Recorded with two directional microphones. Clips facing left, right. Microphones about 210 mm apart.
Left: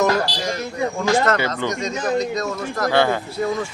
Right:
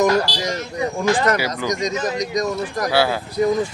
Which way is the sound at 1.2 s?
15° right (ahead or behind).